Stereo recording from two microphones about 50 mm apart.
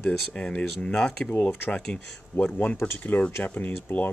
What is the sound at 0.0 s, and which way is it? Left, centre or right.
Speech, left.